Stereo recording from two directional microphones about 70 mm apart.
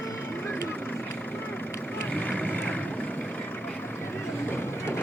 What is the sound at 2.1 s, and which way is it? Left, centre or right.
Boat, centre.